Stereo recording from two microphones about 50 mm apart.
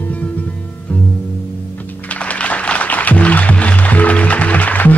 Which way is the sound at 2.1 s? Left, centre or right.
Left.